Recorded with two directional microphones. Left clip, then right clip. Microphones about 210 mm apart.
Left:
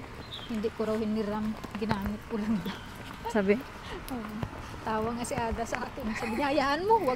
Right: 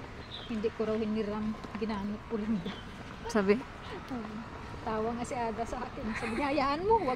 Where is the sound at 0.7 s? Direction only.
10° left (ahead or behind).